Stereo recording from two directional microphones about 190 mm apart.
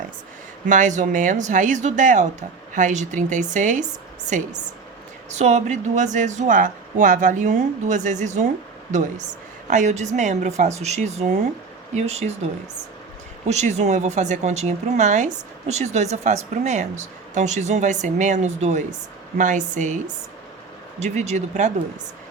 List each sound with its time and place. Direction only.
0.7 s speech: 40° right (ahead or behind)
5.3 s speech: 35° right (ahead or behind)
13.5 s speech: 35° right (ahead or behind)
21.0 s speech: 35° right (ahead or behind)